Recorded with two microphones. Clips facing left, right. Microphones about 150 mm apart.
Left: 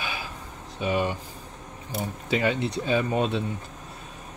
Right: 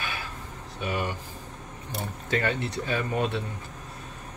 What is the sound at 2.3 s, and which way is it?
Speech, 15° left (ahead or behind).